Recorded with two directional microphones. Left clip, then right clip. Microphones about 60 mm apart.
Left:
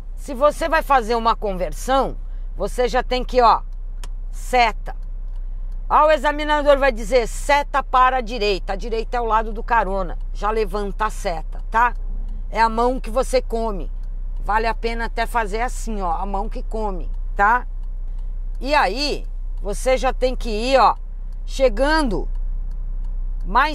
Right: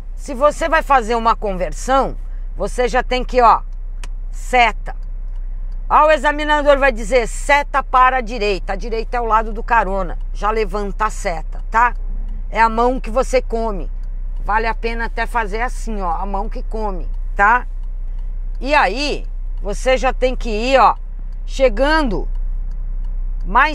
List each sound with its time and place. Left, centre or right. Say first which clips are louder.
0.2 s a man's voice: right 2 dB; centre; by 9.3 s left
9.3 s speech: right 4 dB; centre
14.4 s speech: right 2 dB; left
17.4 s a man's voice: right 3 dB; centre
22.0 s speech: right 2 dB; left
23.4 s speech: right 4 dB; centre